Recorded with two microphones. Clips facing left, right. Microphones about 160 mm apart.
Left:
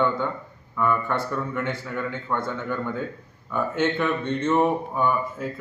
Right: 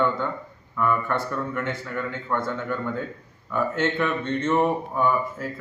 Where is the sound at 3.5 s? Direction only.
15° left (ahead or behind).